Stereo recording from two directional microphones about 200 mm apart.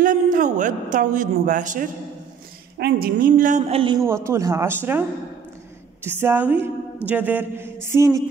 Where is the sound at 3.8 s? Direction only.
25° right (ahead or behind).